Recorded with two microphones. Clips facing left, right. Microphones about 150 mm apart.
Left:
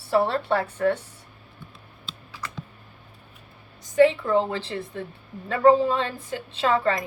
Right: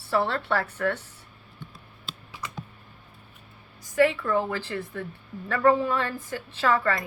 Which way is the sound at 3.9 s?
20° left (ahead or behind).